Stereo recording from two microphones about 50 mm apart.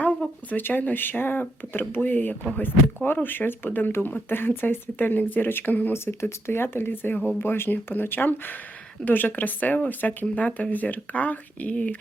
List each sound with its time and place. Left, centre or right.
0.5 s speech: left
5.9 s speech: left
7.3 s speech: left